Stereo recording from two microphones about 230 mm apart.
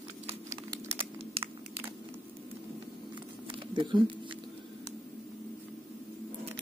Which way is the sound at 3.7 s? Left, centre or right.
Right.